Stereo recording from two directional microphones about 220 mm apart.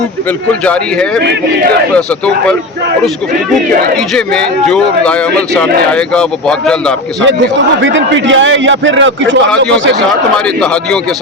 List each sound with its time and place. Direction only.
0.6 s speech: 5° left (ahead or behind)
6.1 s speech: 5° left (ahead or behind)
7.8 s a man's voice: 55° right (ahead or behind)
10.1 s speech: 5° left (ahead or behind)